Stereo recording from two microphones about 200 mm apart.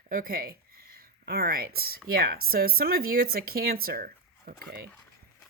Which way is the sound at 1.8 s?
50° right (ahead or behind).